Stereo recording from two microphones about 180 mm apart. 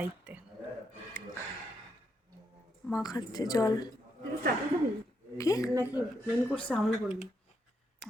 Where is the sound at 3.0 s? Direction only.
20° left (ahead or behind).